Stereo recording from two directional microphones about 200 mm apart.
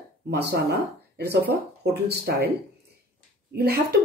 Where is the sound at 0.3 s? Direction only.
55° right (ahead or behind).